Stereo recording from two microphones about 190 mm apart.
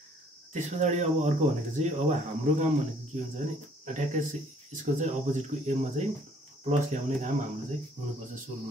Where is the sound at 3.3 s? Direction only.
40° right (ahead or behind).